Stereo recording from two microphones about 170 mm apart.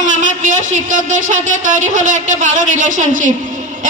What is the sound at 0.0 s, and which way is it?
Speech, 50° right (ahead or behind).